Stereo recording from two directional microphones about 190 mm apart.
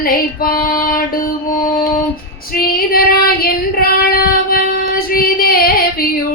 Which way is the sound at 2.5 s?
50° left (ahead or behind).